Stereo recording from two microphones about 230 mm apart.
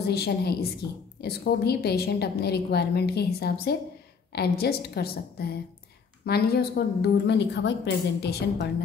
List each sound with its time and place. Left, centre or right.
0.0 s a woman's voice: left